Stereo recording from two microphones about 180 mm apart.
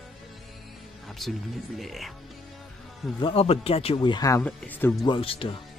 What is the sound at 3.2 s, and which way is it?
Speech, 35° left (ahead or behind).